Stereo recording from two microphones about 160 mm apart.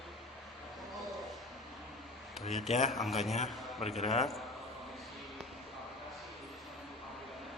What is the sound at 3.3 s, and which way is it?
Speech, 45° left (ahead or behind).